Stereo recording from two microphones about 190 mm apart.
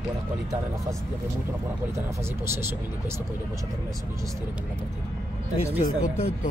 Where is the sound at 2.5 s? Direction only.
15° right (ahead or behind).